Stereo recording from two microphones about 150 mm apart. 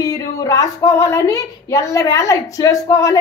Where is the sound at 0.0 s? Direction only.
20° left (ahead or behind).